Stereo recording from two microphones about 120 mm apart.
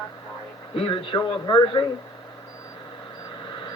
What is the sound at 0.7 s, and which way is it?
A man's voice, 45° left (ahead or behind).